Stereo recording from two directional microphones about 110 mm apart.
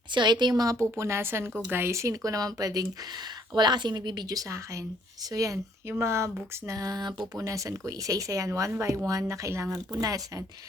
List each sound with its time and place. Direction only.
0.1 s speech: 45° right (ahead or behind)